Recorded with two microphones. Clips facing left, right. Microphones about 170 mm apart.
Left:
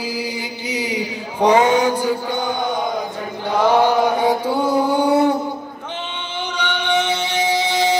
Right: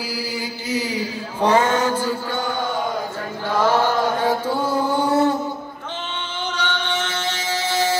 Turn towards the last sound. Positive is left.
turn(degrees=15)  # may be behind; listen again after turning